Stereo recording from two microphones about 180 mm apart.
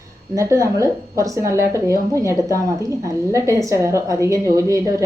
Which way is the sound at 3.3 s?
15° right (ahead or behind).